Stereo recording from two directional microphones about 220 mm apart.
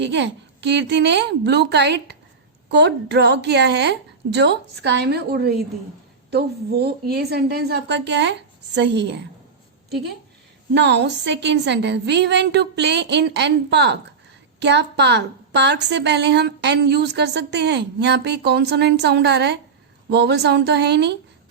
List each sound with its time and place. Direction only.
0.0 s a woman's voice: 55° right (ahead or behind)
10.8 s a woman's voice: 50° right (ahead or behind)